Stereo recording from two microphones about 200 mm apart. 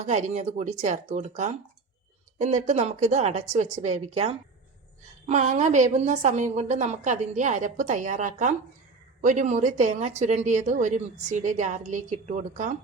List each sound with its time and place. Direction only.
0.0 s speech: 35° right (ahead or behind)